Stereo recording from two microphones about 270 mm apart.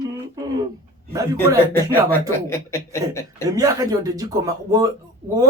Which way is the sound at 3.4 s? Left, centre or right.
Centre.